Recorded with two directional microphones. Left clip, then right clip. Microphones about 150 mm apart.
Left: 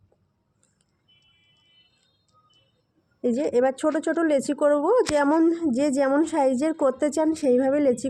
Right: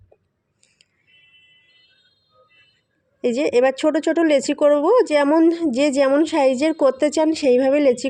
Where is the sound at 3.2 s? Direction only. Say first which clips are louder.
Right 5 dB; 30° right (ahead or behind).